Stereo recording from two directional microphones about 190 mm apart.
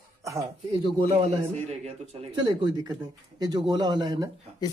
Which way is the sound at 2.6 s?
20° right (ahead or behind).